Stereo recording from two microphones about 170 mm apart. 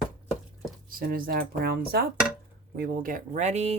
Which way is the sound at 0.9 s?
60° right (ahead or behind).